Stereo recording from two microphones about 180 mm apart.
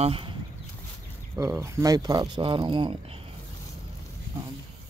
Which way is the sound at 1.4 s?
15° right (ahead or behind).